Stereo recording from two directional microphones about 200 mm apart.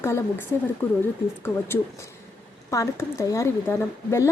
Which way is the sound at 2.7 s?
15° left (ahead or behind).